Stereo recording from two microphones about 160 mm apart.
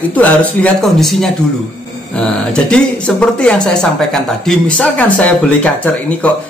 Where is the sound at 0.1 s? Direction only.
10° left (ahead or behind).